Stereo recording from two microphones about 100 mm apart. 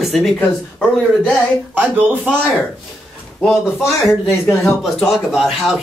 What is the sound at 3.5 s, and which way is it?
Speech, centre (ahead or behind).